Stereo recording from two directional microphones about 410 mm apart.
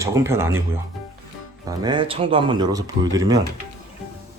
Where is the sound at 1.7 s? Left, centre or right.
Centre.